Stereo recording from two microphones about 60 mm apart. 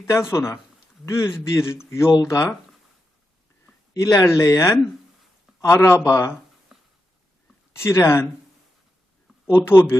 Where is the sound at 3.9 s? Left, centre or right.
Left.